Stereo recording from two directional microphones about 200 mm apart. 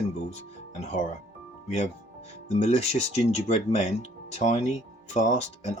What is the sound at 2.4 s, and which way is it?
Speech, 35° left (ahead or behind).